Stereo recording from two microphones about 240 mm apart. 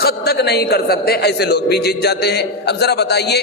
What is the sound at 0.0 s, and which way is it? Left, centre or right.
A man's voice, left.